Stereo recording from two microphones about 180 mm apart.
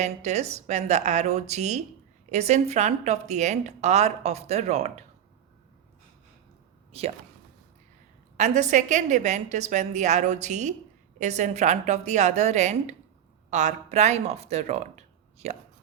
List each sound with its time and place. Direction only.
0.0 s a woman's voice: 40° right (ahead or behind)
6.9 s a woman's voice: 35° right (ahead or behind)
8.4 s a woman's voice: 40° right (ahead or behind)